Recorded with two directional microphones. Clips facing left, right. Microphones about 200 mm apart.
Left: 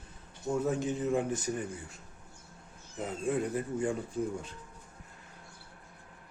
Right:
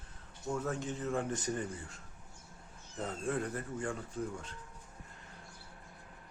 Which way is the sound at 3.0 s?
10° left (ahead or behind).